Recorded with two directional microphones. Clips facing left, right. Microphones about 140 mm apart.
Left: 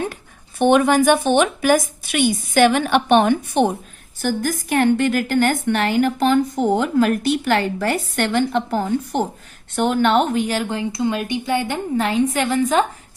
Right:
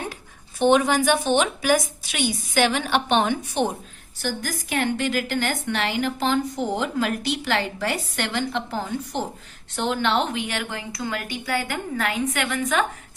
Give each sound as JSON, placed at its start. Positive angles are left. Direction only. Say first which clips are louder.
{"t": 0.6, "sound": "a woman's voice", "louder": "left 4 dB", "side_deg": 55}